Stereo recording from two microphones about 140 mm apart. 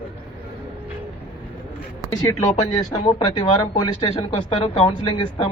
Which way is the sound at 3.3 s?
45° left (ahead or behind).